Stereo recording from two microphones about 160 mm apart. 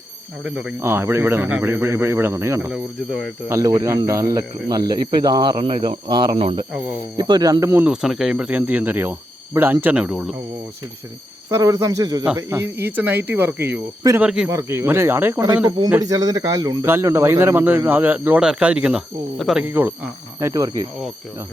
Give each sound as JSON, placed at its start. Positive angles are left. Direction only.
{"t": 0.8, "sound": "speech", "side_deg": -15}
{"t": 2.6, "sound": "speech", "side_deg": -5}
{"t": 3.5, "sound": "a man's voice", "side_deg": -20}
{"t": 7.9, "sound": "speech", "side_deg": 0}
{"t": 11.5, "sound": "a man's voice", "side_deg": -20}
{"t": 14.5, "sound": "speech", "side_deg": -20}
{"t": 20.4, "sound": "a man's voice", "side_deg": -25}